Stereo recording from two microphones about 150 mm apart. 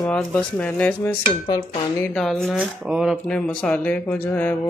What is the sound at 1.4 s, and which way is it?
Speech, 40° left (ahead or behind).